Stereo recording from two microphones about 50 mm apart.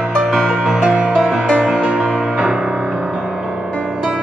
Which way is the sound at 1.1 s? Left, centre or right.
Centre.